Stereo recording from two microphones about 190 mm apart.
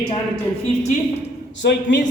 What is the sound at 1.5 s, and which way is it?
Speech, 70° left (ahead or behind).